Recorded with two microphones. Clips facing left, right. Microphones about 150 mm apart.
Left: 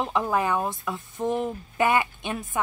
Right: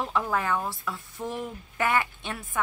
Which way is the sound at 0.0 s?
20° left (ahead or behind).